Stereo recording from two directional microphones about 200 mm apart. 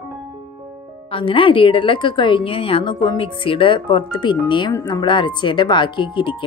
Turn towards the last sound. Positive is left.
turn(degrees=25)  # may be behind; listen again after turning